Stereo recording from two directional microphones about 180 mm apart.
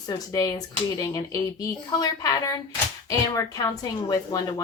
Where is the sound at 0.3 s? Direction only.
20° left (ahead or behind).